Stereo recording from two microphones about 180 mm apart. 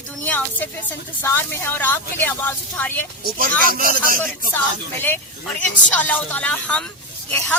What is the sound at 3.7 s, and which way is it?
Speech, 50° right (ahead or behind).